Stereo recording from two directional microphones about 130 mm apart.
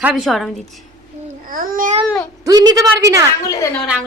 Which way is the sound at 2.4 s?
30° right (ahead or behind).